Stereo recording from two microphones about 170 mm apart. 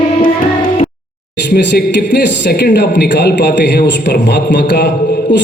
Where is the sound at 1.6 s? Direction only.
90° left.